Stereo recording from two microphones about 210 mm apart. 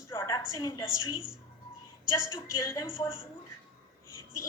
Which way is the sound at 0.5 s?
15° left (ahead or behind).